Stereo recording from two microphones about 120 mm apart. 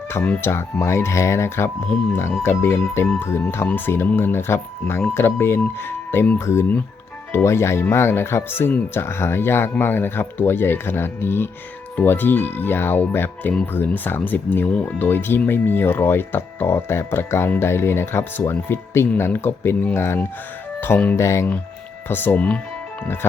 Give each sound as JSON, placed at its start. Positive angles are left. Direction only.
{"t": 0.1, "sound": "speech", "side_deg": 20}